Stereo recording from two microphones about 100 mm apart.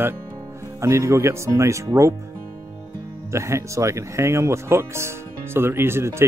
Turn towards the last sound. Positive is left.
turn(degrees=-25)  # may be behind; listen again after turning